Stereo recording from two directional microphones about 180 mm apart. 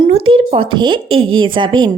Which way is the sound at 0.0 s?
30° right (ahead or behind).